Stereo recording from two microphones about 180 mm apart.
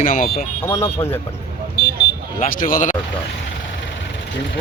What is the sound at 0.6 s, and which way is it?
Speech, 15° left (ahead or behind).